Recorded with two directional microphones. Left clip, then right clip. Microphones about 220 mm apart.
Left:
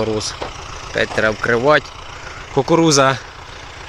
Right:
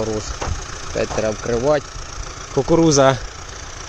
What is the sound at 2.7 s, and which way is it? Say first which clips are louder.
Speech: even; 5° right (ahead or behind).